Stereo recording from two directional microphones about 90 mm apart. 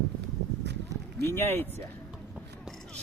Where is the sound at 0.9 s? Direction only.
40° right (ahead or behind).